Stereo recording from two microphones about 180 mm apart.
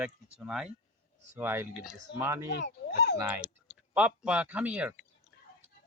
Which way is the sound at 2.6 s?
65° left (ahead or behind).